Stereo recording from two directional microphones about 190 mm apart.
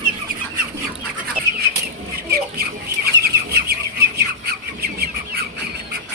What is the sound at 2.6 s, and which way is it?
Chicken, 55° right (ahead or behind).